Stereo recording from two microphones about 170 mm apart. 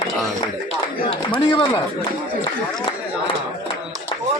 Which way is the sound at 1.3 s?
30° left (ahead or behind).